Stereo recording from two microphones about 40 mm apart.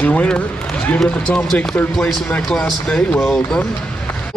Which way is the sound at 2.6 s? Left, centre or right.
Left.